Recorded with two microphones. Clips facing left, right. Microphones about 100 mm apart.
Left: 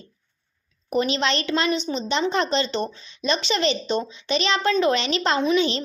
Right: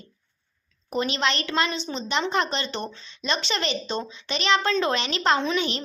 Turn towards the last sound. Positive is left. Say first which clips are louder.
# left 3 dB
turn(degrees=25)  # may be behind; listen again after turning